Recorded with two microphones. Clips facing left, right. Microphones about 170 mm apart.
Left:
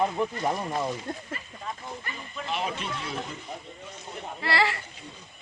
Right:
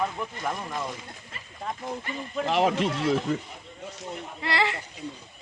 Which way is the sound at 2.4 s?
85° right.